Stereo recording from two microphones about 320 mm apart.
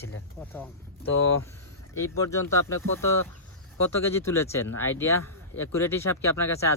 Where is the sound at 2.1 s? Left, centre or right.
Centre.